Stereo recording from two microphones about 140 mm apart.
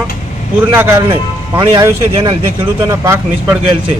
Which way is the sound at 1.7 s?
30° right (ahead or behind).